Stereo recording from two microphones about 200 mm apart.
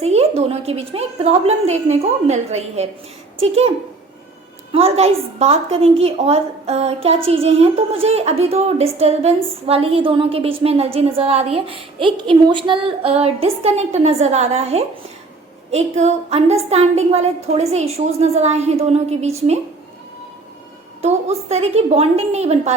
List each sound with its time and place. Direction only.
0.0 s a woman's voice: 30° right (ahead or behind)
4.7 s a woman's voice: 30° right (ahead or behind)
21.0 s a woman's voice: 30° right (ahead or behind)